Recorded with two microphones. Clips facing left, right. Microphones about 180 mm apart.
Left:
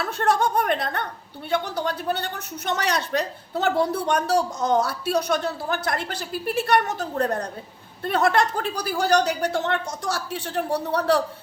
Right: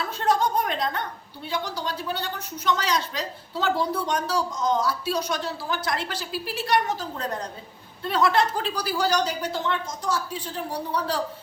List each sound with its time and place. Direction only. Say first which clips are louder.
0.0 s a woman's voice: left 2 dB; 65° left (ahead or behind)